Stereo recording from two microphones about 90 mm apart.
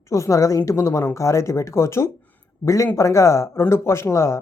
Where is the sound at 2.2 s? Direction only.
20° left (ahead or behind).